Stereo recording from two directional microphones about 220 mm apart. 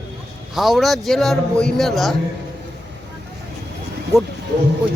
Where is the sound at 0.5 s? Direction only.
Centre (ahead or behind).